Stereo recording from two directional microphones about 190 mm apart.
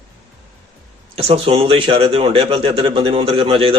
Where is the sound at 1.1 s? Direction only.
30° right (ahead or behind).